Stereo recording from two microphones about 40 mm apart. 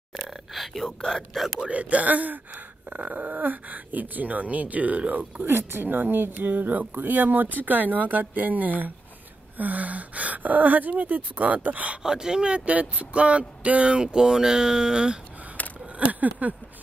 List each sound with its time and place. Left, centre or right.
0.1 s speech: centre
1.6 s speech: right
5.4 s speech: right
12.0 s speech: centre; by 13.9 s right
13.9 s speech: centre
15.6 s a sound: left
16.0 s a sound: right